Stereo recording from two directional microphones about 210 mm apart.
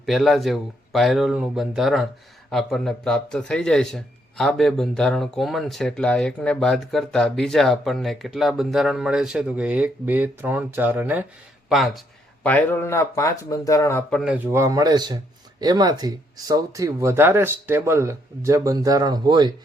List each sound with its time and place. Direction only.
0.0 s a man's voice: centre (ahead or behind)
14.1 s speech: centre (ahead or behind); by 19.5 s 20° right (ahead or behind)